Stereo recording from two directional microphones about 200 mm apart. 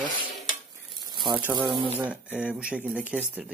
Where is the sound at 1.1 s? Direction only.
25° right (ahead or behind).